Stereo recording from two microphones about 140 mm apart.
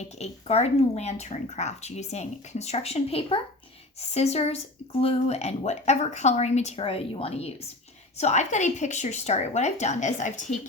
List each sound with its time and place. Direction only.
0.0 s speech: 50° left (ahead or behind)
8.2 s speech: 55° left (ahead or behind)